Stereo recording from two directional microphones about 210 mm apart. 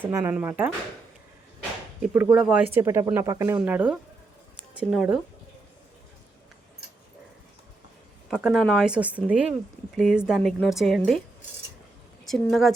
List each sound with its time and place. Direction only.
0.0 s speech: 10° right (ahead or behind)
2.0 s speech: 5° right (ahead or behind)
4.5 s a sound: 5° right (ahead or behind)
8.3 s speech: 5° right (ahead or behind)
12.2 s a woman's voice: centre (ahead or behind)